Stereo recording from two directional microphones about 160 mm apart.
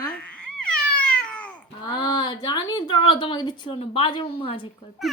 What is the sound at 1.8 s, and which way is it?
A woman's voice, 25° left (ahead or behind).